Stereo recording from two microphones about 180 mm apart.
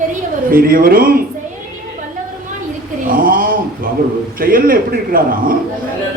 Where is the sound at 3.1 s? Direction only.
50° right (ahead or behind).